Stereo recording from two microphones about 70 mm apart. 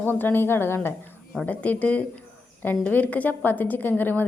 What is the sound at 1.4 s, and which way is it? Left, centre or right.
A woman's voice, left.